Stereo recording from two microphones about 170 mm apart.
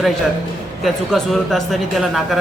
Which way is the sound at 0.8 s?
Centre (ahead or behind).